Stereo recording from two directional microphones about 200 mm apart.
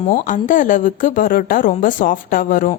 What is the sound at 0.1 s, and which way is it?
A woman's voice, 40° left (ahead or behind).